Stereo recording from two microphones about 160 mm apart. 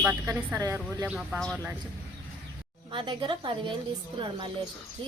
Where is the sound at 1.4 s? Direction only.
5° left (ahead or behind).